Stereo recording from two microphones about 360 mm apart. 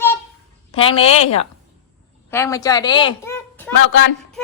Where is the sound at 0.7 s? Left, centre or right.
Centre.